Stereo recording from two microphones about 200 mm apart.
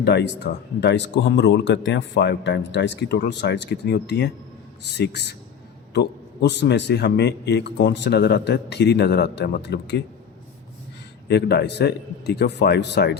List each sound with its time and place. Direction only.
0.0 s speech: 55° left (ahead or behind)
11.3 s speech: 55° left (ahead or behind)